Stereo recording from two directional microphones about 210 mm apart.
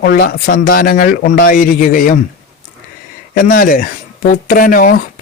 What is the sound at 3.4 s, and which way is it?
A man's voice, 40° left (ahead or behind).